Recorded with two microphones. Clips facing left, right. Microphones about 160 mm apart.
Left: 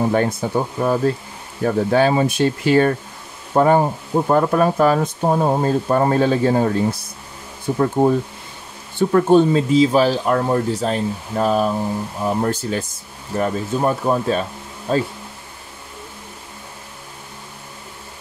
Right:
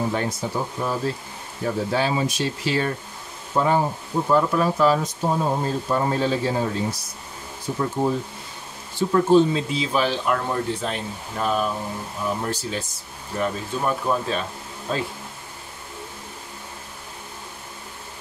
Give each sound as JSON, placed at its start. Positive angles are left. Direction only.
{"t": 0.1, "sound": "speech", "side_deg": 55}
{"t": 12.4, "sound": "speech", "side_deg": 50}